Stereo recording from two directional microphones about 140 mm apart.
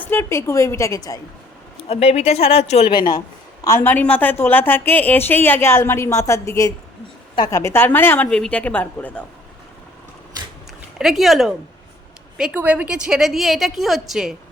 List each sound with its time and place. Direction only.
0.0 s a woman's voice: 15° left (ahead or behind)
1.9 s speech: 50° left (ahead or behind)
3.2 s a woman's voice: 20° left (ahead or behind)
10.9 s a woman's voice: centre (ahead or behind)